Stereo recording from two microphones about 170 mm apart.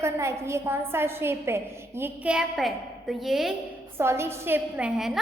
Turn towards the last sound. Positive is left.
turn(degrees=0)  # may be behind; listen again after turning